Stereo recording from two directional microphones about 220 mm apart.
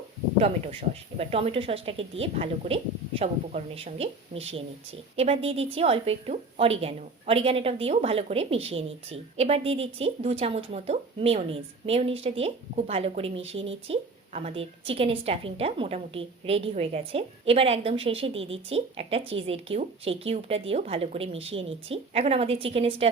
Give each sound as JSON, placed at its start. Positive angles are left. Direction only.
{"t": 0.3, "sound": "a woman's voice", "side_deg": -25}